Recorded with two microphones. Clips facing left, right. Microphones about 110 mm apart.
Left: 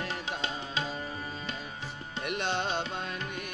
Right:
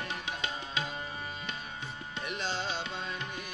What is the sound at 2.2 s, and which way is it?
Music, 60° left (ahead or behind).